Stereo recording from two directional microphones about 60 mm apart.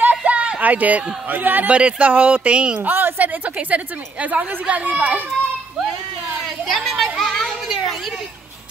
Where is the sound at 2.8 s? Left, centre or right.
Right.